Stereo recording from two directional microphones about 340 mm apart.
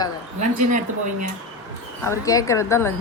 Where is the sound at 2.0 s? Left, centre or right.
Centre.